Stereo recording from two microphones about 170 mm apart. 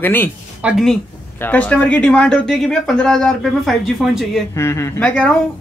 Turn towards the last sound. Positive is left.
turn(degrees=5)  # may be behind; listen again after turning